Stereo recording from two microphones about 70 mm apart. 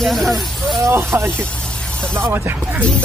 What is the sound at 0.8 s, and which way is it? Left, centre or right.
Speech, right.